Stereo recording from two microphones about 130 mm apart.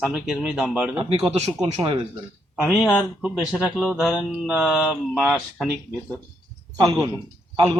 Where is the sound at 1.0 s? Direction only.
45° right (ahead or behind).